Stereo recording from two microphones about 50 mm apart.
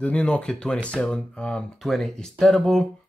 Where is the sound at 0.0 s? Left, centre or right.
Left.